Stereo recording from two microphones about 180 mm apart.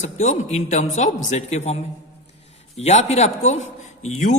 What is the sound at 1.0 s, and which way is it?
Speech, 40° left (ahead or behind).